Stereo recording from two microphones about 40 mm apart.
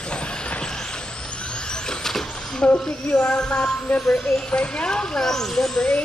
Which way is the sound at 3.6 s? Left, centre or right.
Left.